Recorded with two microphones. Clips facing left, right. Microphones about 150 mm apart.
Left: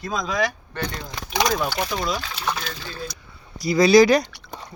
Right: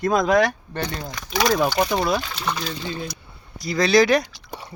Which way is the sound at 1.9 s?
65° right (ahead or behind).